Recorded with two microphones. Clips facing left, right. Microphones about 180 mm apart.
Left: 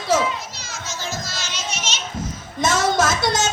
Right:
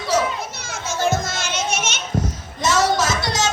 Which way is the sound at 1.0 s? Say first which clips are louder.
Right 11 dB; 55° right (ahead or behind).